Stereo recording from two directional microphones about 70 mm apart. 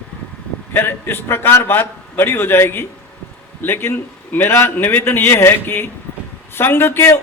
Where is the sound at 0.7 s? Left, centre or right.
Left.